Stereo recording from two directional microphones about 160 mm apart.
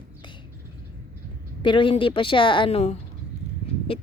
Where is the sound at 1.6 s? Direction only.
30° left (ahead or behind).